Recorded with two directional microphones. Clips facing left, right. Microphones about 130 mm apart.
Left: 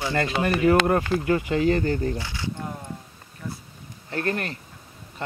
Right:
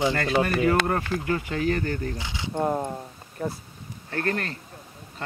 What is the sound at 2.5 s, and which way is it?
Speech, 55° right (ahead or behind).